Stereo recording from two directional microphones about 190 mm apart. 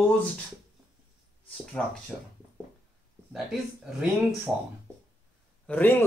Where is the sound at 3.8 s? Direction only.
5° right (ahead or behind).